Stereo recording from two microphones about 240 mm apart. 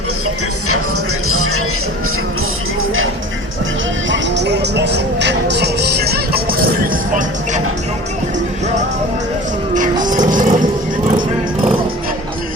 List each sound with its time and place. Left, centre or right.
1.3 s music: right
4.1 s music: right
9.7 s livestock: right